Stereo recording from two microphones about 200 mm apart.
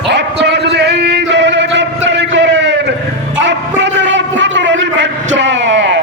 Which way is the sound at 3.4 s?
65° right (ahead or behind).